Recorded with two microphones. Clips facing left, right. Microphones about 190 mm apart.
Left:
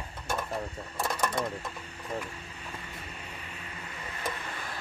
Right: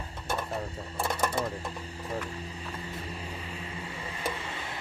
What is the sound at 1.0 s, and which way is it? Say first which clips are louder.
Speech: right 1 dB; 5° right (ahead or behind).